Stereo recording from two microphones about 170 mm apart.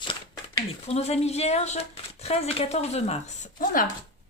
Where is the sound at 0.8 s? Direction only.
40° left (ahead or behind).